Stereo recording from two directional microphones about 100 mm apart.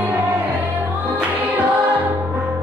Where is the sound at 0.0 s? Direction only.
15° right (ahead or behind).